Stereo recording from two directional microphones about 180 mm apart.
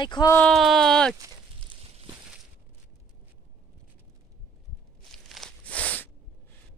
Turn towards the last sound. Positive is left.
turn(degrees=10)  # may be behind; listen again after turning